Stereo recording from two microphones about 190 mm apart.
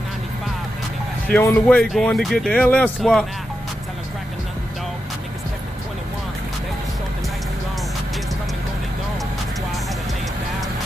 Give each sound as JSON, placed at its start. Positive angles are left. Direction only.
{"t": 1.3, "sound": "speech", "side_deg": 10}